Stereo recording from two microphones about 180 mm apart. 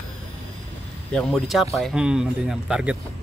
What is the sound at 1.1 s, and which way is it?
Speech, 5° left (ahead or behind).